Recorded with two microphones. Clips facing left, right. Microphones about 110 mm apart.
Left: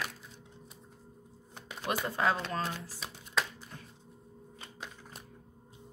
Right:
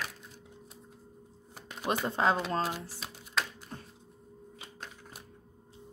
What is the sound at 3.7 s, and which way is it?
Music, 35° right (ahead or behind).